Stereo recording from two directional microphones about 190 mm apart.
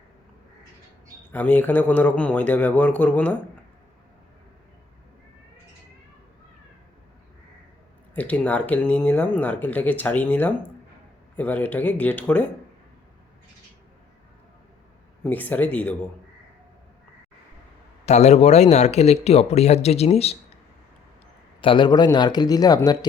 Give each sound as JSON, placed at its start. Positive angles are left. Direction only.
{"t": 1.3, "sound": "speech", "side_deg": 10}
{"t": 8.1, "sound": "speech", "side_deg": 10}
{"t": 15.2, "sound": "speech", "side_deg": 10}
{"t": 18.0, "sound": "a man's voice", "side_deg": 35}
{"t": 21.6, "sound": "speech", "side_deg": 25}